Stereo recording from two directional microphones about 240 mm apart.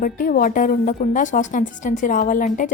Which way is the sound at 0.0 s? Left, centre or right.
Left.